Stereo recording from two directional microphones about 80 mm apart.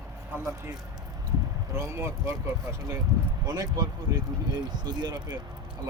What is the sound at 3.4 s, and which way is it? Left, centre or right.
Speech, right.